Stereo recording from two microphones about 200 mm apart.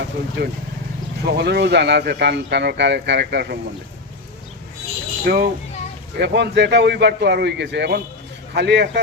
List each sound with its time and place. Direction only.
0.4 s speech: 55° right (ahead or behind)
5.2 s speech: 55° right (ahead or behind)